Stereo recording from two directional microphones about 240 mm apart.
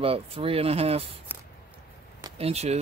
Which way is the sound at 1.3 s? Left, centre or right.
Centre.